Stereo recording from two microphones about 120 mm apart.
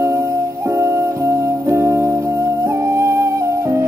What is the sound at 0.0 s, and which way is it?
Music, 25° right (ahead or behind).